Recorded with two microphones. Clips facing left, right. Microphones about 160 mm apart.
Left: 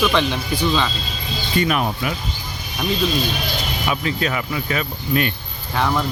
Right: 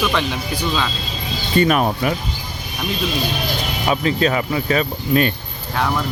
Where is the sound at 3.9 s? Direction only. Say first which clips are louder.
Right 5 dB; 35° right (ahead or behind).